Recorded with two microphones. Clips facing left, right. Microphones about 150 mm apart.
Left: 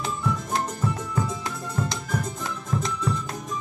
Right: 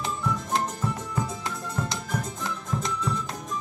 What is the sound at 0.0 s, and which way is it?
Music, 5° left (ahead or behind).